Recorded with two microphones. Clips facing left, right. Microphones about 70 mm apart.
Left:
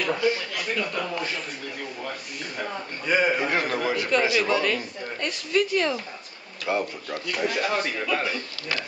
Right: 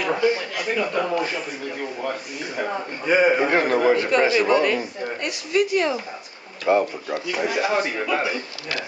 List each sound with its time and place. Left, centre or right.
0.0 s a man's voice: centre
3.1 s a man's voice: centre
3.4 s a man's voice: right
4.4 s a man's voice: centre
6.7 s speech: right
7.1 s a man's voice: centre